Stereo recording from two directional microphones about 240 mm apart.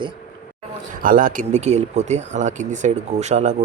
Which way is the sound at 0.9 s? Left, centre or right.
Right.